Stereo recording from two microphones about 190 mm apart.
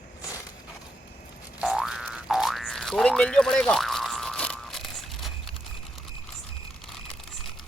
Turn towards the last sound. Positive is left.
turn(degrees=0)  # may be behind; listen again after turning